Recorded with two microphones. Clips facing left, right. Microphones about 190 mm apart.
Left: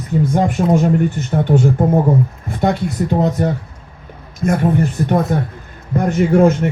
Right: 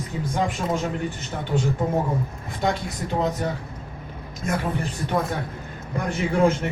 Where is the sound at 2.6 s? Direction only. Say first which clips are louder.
Left 8 dB; 55° left (ahead or behind).